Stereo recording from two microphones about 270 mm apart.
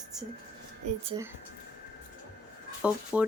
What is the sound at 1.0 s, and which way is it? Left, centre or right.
Speech, centre.